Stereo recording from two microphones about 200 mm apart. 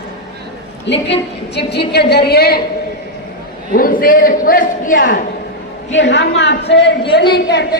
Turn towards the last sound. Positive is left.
turn(degrees=55)  # may be behind; listen again after turning